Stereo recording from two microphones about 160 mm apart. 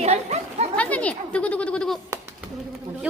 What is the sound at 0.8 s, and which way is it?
Goat, 10° left (ahead or behind).